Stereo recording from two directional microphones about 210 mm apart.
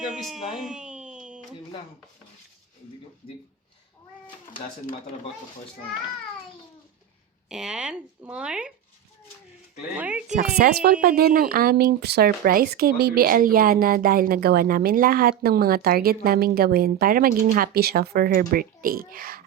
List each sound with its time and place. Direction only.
0.0 s a sound: centre (ahead or behind)
7.5 s speech: 5° right (ahead or behind)
10.0 s speech: 5° right (ahead or behind)
10.6 s speech: 50° right (ahead or behind)